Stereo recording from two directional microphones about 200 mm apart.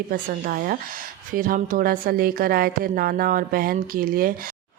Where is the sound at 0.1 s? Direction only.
45° right (ahead or behind).